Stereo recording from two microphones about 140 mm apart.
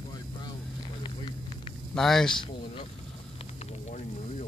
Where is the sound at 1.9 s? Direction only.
5° left (ahead or behind).